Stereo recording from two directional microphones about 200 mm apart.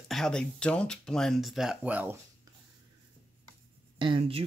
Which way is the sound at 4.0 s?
25° right (ahead or behind).